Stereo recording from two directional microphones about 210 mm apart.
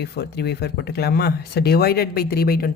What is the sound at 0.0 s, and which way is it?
A woman's voice, 50° left (ahead or behind).